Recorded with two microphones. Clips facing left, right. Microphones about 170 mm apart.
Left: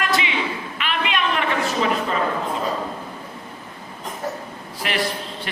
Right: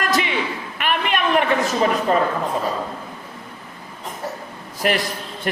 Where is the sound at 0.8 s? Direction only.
50° right (ahead or behind).